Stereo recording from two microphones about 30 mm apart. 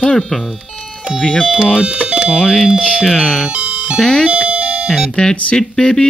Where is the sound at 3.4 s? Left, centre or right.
Right.